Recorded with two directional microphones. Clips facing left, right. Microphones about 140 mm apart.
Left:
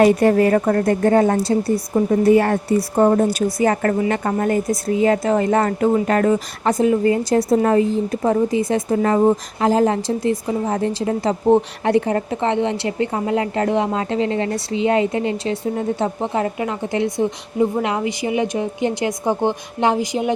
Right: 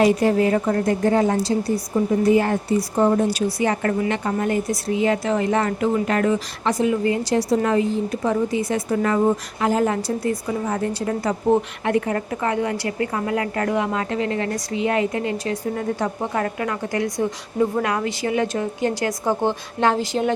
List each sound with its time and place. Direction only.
0.0 s a woman's voice: 55° left (ahead or behind); by 20.3 s 15° left (ahead or behind)